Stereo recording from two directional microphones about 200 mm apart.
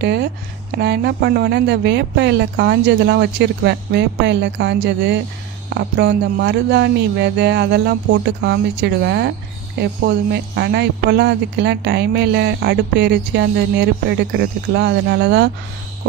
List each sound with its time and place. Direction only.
0.0 s speech: 55° right (ahead or behind)